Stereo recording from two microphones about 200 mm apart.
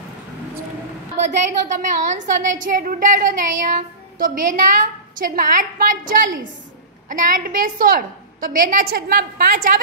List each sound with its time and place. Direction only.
1.1 s a woman's voice: 35° right (ahead or behind)